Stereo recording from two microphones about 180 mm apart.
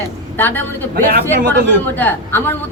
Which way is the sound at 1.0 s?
50° right (ahead or behind).